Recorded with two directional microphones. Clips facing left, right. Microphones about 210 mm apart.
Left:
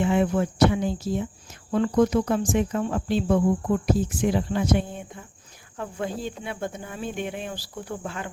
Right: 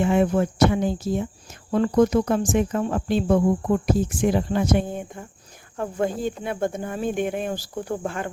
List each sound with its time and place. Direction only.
0.0 s speech: 45° right (ahead or behind)